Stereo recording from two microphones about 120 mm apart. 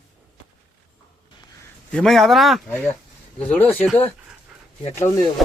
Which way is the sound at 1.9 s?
5° left (ahead or behind).